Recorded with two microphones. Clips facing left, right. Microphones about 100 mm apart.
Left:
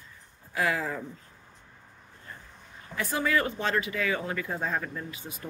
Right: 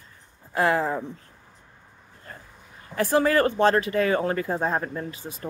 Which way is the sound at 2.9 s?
40° right (ahead or behind).